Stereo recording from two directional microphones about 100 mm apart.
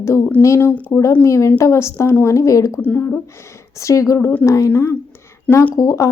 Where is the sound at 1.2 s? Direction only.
30° left (ahead or behind).